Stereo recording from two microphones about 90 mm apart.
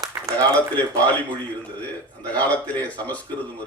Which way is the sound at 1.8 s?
15° left (ahead or behind).